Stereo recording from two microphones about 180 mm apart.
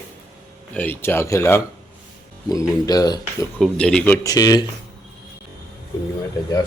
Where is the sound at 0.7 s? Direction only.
10° left (ahead or behind).